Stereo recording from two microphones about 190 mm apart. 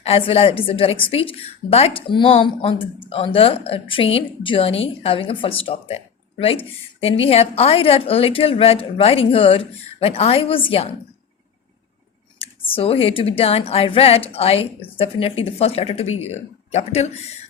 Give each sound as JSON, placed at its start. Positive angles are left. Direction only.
{"t": 0.0, "sound": "a woman's voice", "side_deg": 30}
{"t": 12.4, "sound": "a woman's voice", "side_deg": 30}